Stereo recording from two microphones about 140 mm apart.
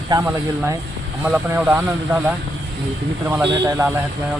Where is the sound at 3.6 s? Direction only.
20° right (ahead or behind).